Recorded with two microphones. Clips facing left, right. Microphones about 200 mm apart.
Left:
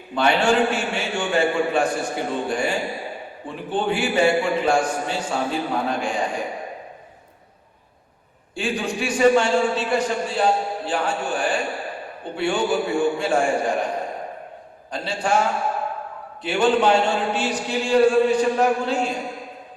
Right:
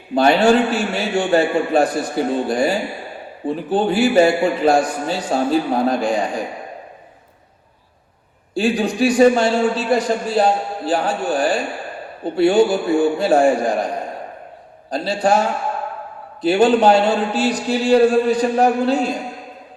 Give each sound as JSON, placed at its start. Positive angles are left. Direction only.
{"t": 0.1, "sound": "a man's voice", "side_deg": -35}
{"t": 8.5, "sound": "a man's voice", "side_deg": -35}
{"t": 14.8, "sound": "a man's voice", "side_deg": -35}